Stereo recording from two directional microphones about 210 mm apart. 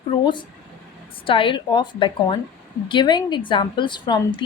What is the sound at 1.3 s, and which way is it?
A woman's voice, 25° left (ahead or behind).